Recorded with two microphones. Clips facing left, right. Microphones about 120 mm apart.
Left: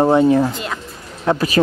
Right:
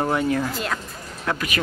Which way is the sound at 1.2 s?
30° left (ahead or behind).